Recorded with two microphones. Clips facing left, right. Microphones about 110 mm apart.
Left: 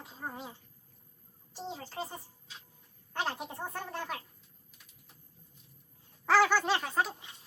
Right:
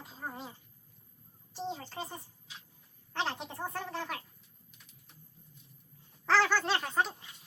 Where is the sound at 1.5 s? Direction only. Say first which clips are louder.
Right 1 dB; 5° left (ahead or behind).